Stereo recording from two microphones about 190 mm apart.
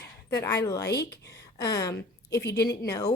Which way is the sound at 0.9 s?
60° left (ahead or behind).